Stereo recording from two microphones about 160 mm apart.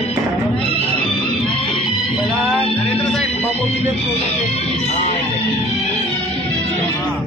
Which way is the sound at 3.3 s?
40° left (ahead or behind).